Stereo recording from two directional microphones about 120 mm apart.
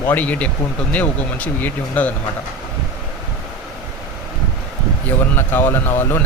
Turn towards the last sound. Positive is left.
turn(degrees=20)  # may be behind; listen again after turning